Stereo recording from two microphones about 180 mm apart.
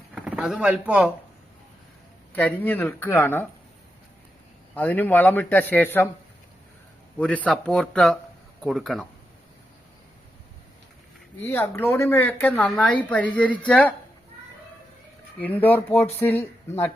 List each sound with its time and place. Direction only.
0.1 s speech: 5° right (ahead or behind)
2.3 s a woman's voice: 10° left (ahead or behind)
4.7 s a woman's voice: 10° left (ahead or behind)
7.2 s speech: 5° left (ahead or behind)
11.4 s a woman's voice: 15° left (ahead or behind)
15.4 s a woman's voice: 10° left (ahead or behind)